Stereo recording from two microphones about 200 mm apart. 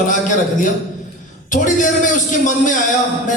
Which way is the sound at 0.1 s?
40° left (ahead or behind).